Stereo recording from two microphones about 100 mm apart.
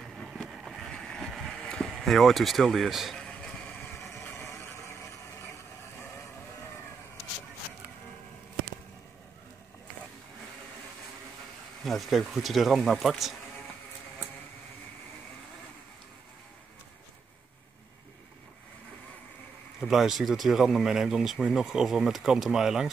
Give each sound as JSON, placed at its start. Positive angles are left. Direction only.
{"t": 0.0, "sound": "boat", "side_deg": 0}
{"t": 3.8, "sound": "vehicle", "side_deg": 25}
{"t": 11.8, "sound": "speech", "side_deg": 0}
{"t": 19.8, "sound": "speech", "side_deg": -5}